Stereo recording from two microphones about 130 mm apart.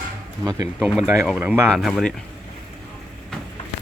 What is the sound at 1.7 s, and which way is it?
Speech, centre (ahead or behind).